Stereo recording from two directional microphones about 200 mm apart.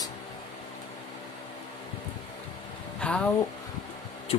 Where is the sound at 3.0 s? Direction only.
5° left (ahead or behind).